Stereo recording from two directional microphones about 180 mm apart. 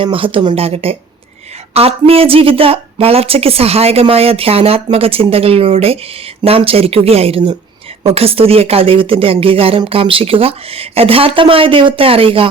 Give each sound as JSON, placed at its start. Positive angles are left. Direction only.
{"t": 0.0, "sound": "speech", "side_deg": -30}